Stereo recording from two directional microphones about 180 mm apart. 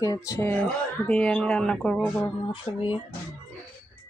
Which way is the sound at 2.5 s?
25° left (ahead or behind).